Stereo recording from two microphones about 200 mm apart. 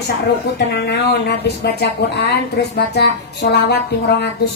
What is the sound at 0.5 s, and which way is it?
Speech, 55° left (ahead or behind).